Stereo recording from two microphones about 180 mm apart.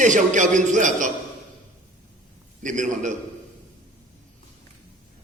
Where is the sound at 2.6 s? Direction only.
45° right (ahead or behind).